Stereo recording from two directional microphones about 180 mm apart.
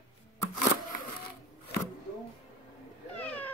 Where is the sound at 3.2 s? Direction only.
10° left (ahead or behind).